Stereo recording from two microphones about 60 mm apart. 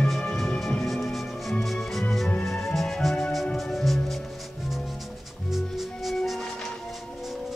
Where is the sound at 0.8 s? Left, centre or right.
Centre.